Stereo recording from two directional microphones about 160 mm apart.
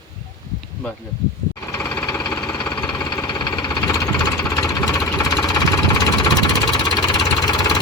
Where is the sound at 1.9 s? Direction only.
10° left (ahead or behind).